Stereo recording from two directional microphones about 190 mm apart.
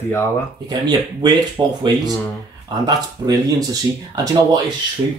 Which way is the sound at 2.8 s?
20° right (ahead or behind).